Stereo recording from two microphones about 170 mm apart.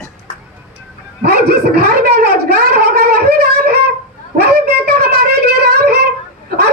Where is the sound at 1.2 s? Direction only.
65° right (ahead or behind).